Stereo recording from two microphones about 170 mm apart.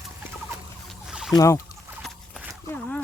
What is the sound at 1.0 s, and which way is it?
Boat, 5° right (ahead or behind).